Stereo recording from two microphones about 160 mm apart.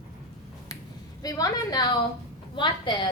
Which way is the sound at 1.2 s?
25° left (ahead or behind).